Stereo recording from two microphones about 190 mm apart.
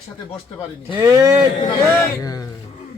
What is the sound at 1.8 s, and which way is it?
Speech, 15° left (ahead or behind).